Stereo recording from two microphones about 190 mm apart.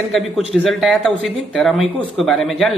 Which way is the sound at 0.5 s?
Centre (ahead or behind).